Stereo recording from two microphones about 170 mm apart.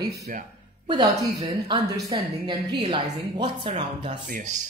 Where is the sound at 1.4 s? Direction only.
25° right (ahead or behind).